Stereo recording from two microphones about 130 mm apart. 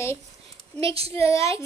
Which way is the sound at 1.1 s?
25° left (ahead or behind).